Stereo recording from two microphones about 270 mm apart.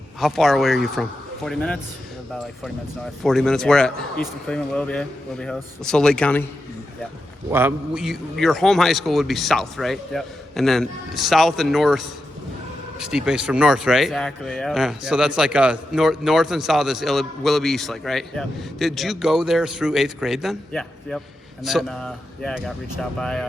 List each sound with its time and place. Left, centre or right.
0.2 s a man's voice: centre
3.2 s a man's voice: centre
7.5 s a man's voice: centre